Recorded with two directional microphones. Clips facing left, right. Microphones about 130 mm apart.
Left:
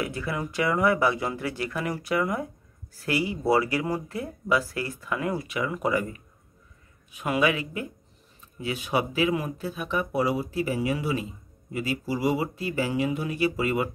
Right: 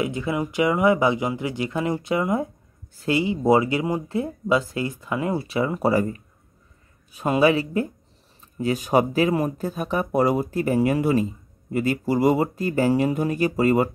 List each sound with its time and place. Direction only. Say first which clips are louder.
0.0 s speech: right 5 dB; 20° right (ahead or behind); by 13.8 s 40° right (ahead or behind)